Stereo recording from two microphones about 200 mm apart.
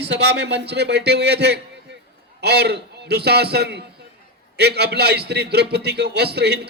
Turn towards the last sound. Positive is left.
turn(degrees=-55)  # may be behind; listen again after turning